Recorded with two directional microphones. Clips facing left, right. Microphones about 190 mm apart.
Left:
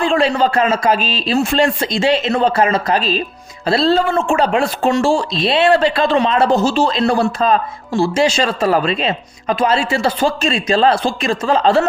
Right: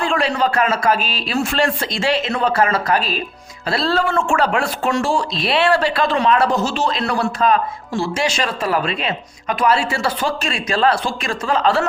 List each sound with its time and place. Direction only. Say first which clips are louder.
0.0 s speech: left 4 dB; 25° left (ahead or behind)